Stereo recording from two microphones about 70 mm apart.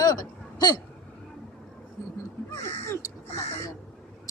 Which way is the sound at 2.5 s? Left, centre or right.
Left.